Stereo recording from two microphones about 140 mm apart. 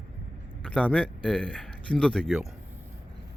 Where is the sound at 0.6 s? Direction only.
10° left (ahead or behind).